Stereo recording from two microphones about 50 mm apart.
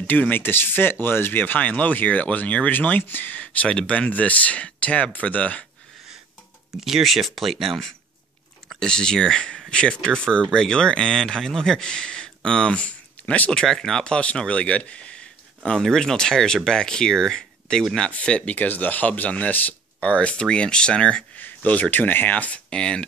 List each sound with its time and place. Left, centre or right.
0.0 s speech: left
1.4 s speech: left
6.8 s speech: centre
8.6 s speech: centre
12.7 s a sound: left
13.7 s speech: centre
15.7 s speech: centre
21.9 s speech: left
22.7 s speech: centre